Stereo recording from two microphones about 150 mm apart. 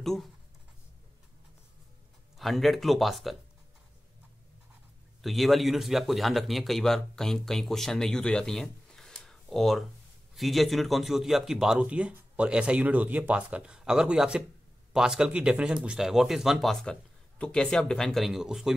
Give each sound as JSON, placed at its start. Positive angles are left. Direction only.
{"t": 0.0, "sound": "speech", "side_deg": 0}
{"t": 2.3, "sound": "a man's voice", "side_deg": 0}
{"t": 5.2, "sound": "a man's voice", "side_deg": 0}